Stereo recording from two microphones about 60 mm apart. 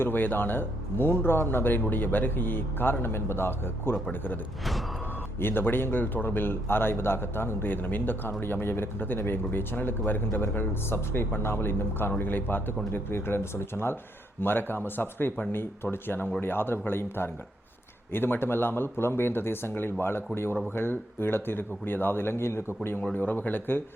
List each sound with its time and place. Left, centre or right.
0.0 s a man's voice: left
5.4 s a man's voice: left